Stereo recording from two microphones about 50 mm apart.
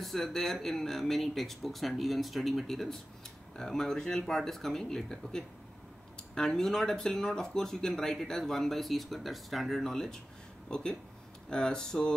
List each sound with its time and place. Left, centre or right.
0.0 s speech: centre